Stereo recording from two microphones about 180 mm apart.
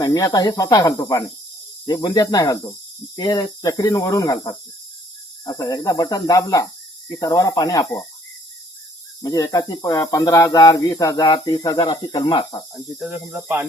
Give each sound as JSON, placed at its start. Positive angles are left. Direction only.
{"t": 0.0, "sound": "speech", "side_deg": 20}
{"t": 9.2, "sound": "speech", "side_deg": 20}
{"t": 12.7, "sound": "speech", "side_deg": -5}